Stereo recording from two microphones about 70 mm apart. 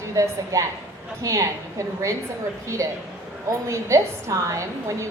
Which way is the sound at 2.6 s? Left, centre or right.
Right.